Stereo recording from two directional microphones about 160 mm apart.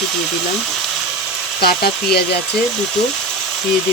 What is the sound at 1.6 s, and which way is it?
Speech, 75° left (ahead or behind).